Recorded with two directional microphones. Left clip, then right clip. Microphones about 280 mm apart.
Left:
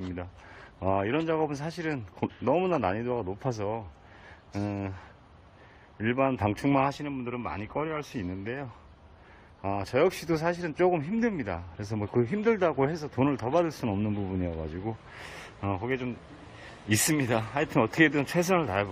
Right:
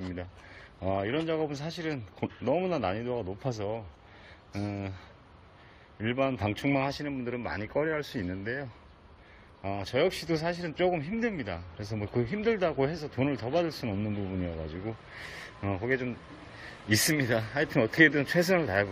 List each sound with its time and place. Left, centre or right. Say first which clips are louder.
0.0 s a sound: left 1 dB; centre
0.8 s a man's voice: left 3 dB; centre
5.9 s a man's voice: left 3 dB; centre